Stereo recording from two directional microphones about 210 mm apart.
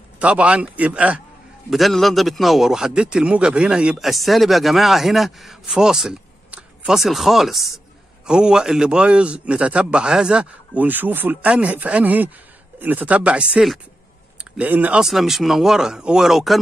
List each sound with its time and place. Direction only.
0.2 s a man's voice: 5° right (ahead or behind)